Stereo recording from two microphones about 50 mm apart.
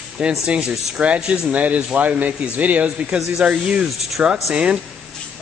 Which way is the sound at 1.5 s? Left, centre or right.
Right.